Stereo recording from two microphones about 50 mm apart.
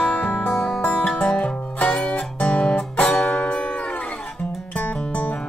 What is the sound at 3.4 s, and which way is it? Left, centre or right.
Music, left.